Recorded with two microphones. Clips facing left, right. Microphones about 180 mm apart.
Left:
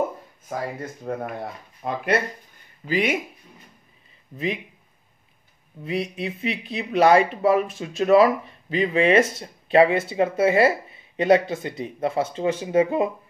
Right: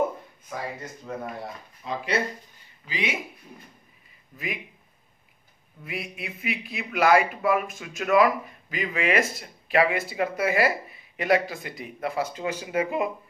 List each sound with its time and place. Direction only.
1.0 s speech: 60° left (ahead or behind)
5.9 s speech: 30° left (ahead or behind)